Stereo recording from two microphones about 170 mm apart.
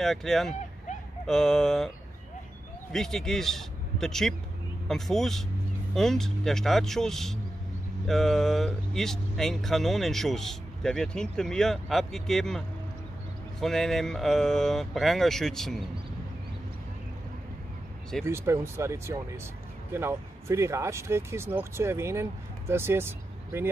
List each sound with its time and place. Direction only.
0.0 s speech: centre (ahead or behind)
2.9 s a man's voice: centre (ahead or behind)
18.2 s speech: 15° right (ahead or behind)